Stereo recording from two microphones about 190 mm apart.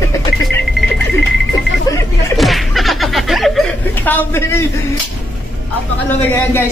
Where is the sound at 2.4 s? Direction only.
Centre (ahead or behind).